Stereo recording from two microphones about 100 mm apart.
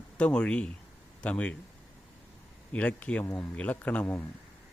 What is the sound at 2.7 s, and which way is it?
Speech, 15° left (ahead or behind).